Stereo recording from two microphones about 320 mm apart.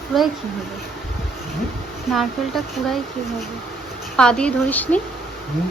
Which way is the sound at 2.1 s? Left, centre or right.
Centre.